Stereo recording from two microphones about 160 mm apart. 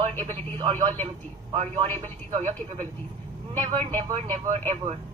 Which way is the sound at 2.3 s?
45° right (ahead or behind).